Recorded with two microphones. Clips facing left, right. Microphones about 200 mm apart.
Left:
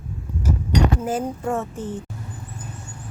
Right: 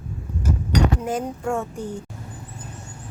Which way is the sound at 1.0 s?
5° left (ahead or behind).